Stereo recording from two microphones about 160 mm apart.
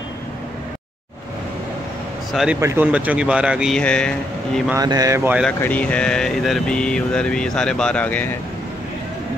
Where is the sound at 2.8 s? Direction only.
10° right (ahead or behind).